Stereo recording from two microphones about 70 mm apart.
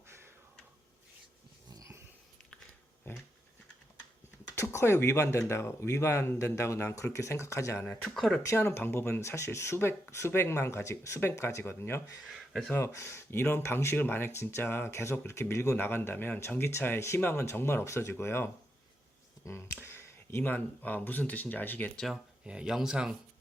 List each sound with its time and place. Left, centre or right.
4.5 s speech: left
7.8 s speech: left
8.1 s speech: centre
8.5 s speech: left
15.7 s speech: left
22.1 s speech: centre